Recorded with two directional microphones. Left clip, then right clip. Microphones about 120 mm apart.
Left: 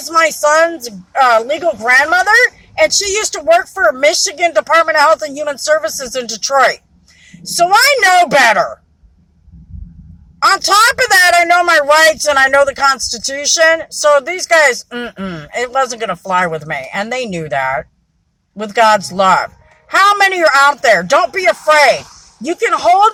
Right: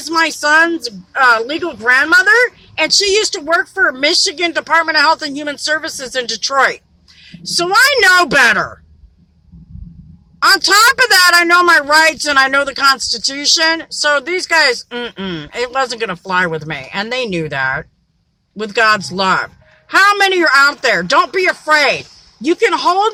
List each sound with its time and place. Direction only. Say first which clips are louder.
0.1 s a woman's voice: left 2 dB; 20° right (ahead or behind)
8.4 s speech: left 2 dB; 5° right (ahead or behind)
10.4 s a woman's voice: even; 20° right (ahead or behind)